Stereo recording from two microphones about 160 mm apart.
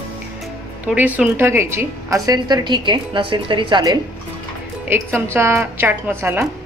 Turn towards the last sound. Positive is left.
turn(degrees=-15)  # may be behind; listen again after turning